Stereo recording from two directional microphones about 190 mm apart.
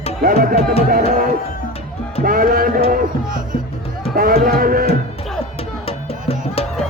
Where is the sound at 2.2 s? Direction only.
50° right (ahead or behind).